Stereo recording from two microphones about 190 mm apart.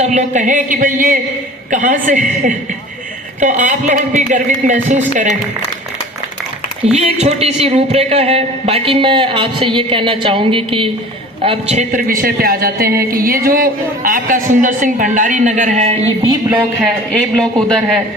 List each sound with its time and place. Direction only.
0.0 s speech: 35° right (ahead or behind)
3.4 s speech: 40° right (ahead or behind)
6.9 s a man's voice: 35° right (ahead or behind)
17.1 s a man's voice: 5° left (ahead or behind)